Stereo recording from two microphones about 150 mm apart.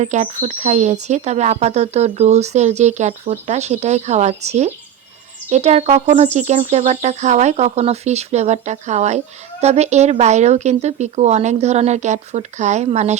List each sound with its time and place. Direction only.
0.0 s speech: 55° right (ahead or behind)